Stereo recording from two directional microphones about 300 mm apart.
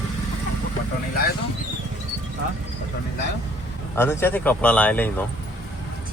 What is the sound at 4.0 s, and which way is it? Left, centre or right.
Speech, centre.